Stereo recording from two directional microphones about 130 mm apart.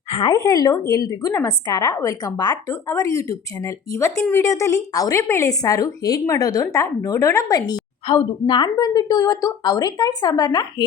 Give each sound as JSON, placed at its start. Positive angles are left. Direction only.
{"t": 0.1, "sound": "a woman's voice", "side_deg": 40}